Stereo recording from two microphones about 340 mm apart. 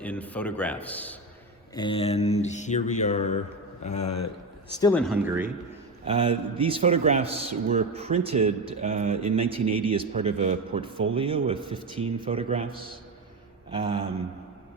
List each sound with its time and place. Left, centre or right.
0.0 s speech: centre
1.7 s mantra: centre
4.8 s speech: centre
6.1 s a man's voice: centre